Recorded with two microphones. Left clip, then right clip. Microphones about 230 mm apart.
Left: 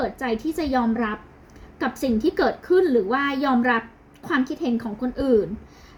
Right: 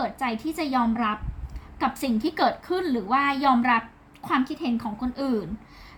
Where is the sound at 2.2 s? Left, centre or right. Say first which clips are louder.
Left 1 dB; right.